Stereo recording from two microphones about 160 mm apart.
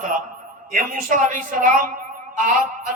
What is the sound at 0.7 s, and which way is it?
A man's voice, 60° right (ahead or behind).